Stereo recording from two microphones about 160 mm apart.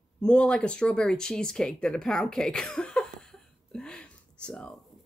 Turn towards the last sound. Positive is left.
turn(degrees=5)  # may be behind; listen again after turning